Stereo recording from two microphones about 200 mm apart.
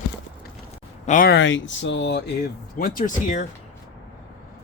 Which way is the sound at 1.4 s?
70° left (ahead or behind).